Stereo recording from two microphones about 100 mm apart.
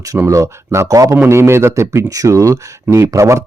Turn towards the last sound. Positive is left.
turn(degrees=-30)  # may be behind; listen again after turning